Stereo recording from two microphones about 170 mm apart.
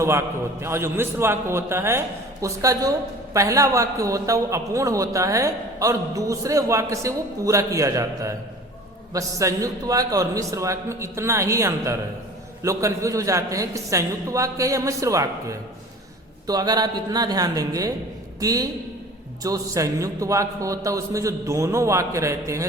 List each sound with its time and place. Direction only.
0.0 s a man's voice: 15° right (ahead or behind)